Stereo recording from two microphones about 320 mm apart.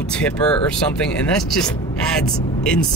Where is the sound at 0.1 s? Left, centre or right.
Centre.